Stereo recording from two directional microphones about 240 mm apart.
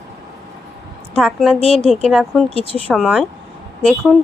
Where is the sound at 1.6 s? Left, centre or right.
Left.